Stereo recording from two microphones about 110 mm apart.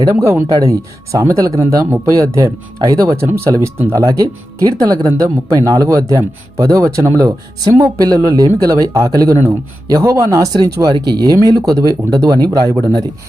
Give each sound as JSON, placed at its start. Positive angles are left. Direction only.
{"t": 0.2, "sound": "speech", "side_deg": -20}
{"t": 0.4, "sound": "speech", "side_deg": -30}